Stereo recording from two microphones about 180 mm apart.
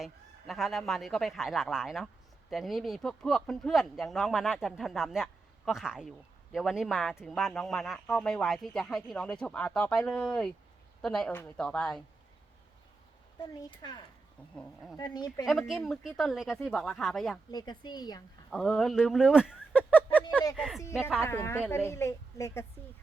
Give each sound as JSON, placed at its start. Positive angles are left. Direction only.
{"t": 0.0, "sound": "speech", "side_deg": 0}
{"t": 13.7, "sound": "speech", "side_deg": 25}
{"t": 14.5, "sound": "speech", "side_deg": 5}
{"t": 14.9, "sound": "speech", "side_deg": 25}
{"t": 15.4, "sound": "speech", "side_deg": 0}
{"t": 17.5, "sound": "speech", "side_deg": 25}
{"t": 18.5, "sound": "speech", "side_deg": 0}
{"t": 20.6, "sound": "a sound", "side_deg": 0}
{"t": 21.2, "sound": "a woman's voice", "side_deg": 15}